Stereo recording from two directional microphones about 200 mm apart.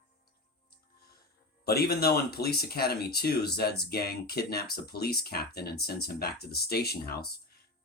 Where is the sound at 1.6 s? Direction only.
50° left (ahead or behind).